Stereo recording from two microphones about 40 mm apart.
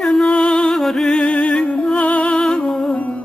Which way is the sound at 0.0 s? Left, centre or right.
Centre.